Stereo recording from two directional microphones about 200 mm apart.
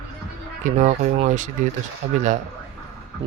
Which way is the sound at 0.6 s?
35° right (ahead or behind).